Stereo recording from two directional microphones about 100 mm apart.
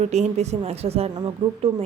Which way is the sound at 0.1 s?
90° right.